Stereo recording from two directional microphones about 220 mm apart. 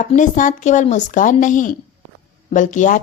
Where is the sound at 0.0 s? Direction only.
35° left (ahead or behind).